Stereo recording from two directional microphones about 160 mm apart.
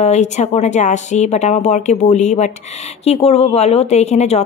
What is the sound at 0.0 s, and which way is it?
Speech, 45° left (ahead or behind).